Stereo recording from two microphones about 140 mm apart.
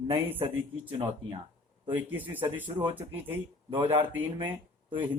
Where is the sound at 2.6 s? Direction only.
35° right (ahead or behind).